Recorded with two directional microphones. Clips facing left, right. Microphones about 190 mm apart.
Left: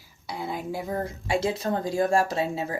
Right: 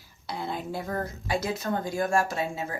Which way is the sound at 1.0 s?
25° left (ahead or behind).